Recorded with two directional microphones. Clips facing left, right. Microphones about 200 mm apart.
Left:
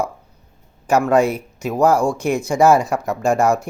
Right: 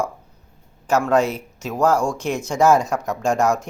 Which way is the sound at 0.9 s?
10° left (ahead or behind).